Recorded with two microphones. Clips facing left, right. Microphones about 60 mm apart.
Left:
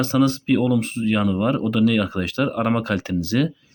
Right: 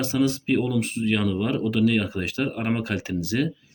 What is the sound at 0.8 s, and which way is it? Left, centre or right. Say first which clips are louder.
Speech: left 3 dB; left.